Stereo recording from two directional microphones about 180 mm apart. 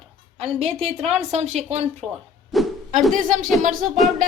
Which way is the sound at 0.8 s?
35° right (ahead or behind).